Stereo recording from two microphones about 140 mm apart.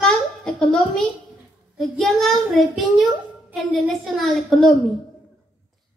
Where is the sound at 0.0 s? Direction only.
5° left (ahead or behind).